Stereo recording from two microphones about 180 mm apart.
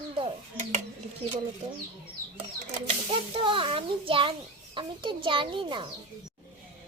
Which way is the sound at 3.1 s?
30° right (ahead or behind).